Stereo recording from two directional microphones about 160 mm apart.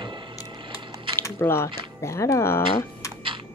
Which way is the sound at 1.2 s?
15° left (ahead or behind).